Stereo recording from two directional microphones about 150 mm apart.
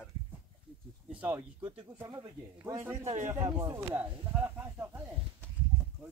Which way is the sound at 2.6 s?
20° right (ahead or behind).